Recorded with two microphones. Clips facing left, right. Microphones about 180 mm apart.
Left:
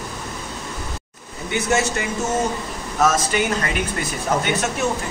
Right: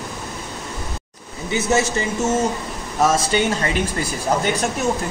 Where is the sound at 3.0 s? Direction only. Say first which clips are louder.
Right 1 dB; 30° right (ahead or behind).